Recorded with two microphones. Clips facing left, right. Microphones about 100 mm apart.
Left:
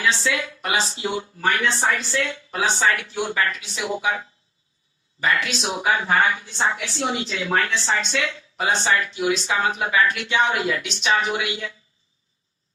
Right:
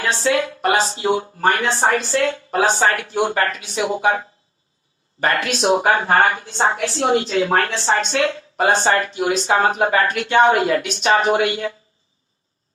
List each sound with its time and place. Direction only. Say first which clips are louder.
0.0 s a woman's voice: right 4 dB; 50° right (ahead or behind)